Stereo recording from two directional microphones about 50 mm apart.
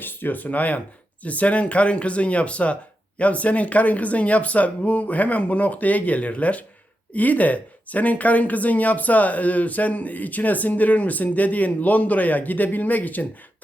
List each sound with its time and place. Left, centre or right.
0.0 s speech: left